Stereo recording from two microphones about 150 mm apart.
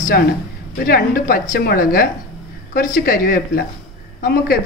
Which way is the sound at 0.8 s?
70° left (ahead or behind).